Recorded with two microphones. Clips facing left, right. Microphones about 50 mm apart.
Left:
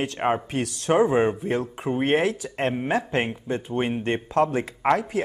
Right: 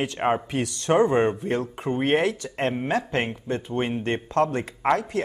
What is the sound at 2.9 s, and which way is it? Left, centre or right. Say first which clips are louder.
Speech: left 1 dB; left.